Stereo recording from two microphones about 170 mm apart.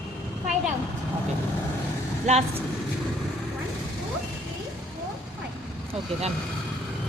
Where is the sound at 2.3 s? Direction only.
40° right (ahead or behind).